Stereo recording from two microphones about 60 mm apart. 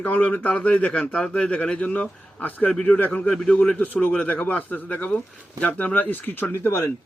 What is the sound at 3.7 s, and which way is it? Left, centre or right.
A man's voice, left.